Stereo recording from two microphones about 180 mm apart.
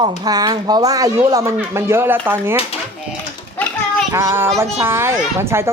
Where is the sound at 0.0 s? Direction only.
20° right (ahead or behind).